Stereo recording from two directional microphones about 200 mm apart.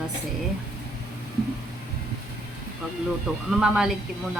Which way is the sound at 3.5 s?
5° right (ahead or behind).